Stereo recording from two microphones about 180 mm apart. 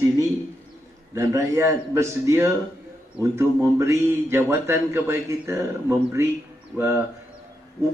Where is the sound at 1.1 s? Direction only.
15° right (ahead or behind).